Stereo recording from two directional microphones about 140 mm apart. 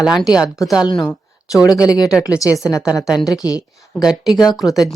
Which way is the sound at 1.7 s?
25° left (ahead or behind).